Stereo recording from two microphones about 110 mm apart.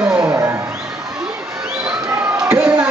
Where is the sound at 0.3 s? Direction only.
25° right (ahead or behind).